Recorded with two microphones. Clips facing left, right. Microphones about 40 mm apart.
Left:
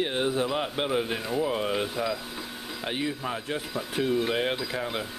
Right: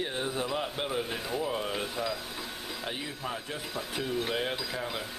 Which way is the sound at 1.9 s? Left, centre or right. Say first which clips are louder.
Left 4 dB; centre.